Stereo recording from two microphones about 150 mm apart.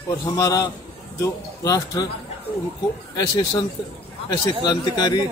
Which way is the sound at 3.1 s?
25° left (ahead or behind).